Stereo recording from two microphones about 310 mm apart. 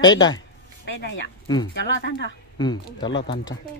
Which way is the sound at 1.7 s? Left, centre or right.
Left.